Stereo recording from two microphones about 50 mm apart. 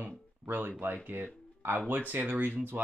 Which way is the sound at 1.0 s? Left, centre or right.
Right.